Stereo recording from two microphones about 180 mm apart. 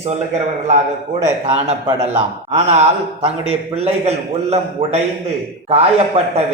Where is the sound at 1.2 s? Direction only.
40° right (ahead or behind).